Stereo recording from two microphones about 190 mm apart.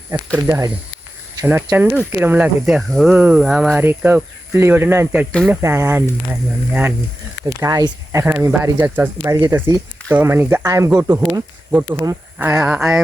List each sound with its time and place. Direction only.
0.3 s speech: 15° right (ahead or behind)